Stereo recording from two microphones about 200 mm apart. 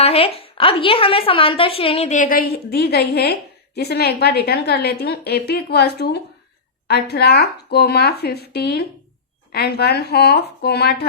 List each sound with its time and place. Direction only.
0.0 s a woman's voice: 30° left (ahead or behind); by 11.0 s 55° left (ahead or behind)